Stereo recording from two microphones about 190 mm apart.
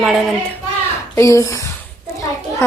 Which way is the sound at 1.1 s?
15° left (ahead or behind).